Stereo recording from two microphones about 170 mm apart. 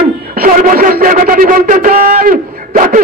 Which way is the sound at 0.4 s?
55° right (ahead or behind).